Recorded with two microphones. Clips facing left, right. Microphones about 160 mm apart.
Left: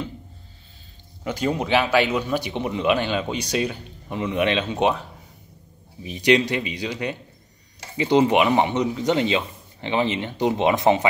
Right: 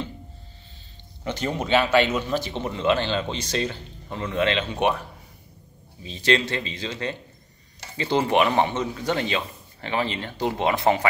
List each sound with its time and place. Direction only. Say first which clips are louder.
1.2 s speech: left 3 dB; 10° left (ahead or behind)
6.0 s speech: left 4 dB; 15° left (ahead or behind)